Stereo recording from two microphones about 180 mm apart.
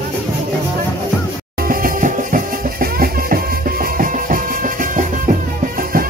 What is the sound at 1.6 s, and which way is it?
Music, 50° right (ahead or behind).